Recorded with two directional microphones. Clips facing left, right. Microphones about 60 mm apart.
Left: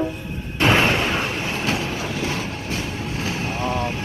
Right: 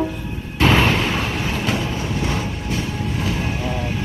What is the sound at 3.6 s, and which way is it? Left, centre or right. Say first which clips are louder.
Vehicle: left 2 dB; left.